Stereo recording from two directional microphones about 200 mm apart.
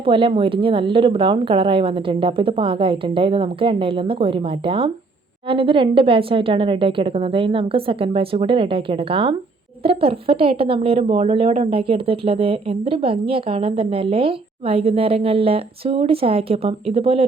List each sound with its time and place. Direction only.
0.0 s speech: 25° right (ahead or behind)